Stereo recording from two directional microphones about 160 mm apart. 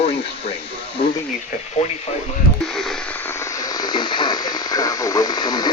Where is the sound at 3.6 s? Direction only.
25° left (ahead or behind).